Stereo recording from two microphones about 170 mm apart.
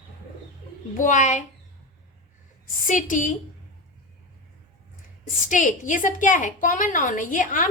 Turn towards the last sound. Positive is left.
turn(degrees=50)  # may be behind; listen again after turning